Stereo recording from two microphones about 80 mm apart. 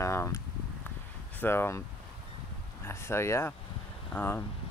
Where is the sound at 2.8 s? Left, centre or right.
Left.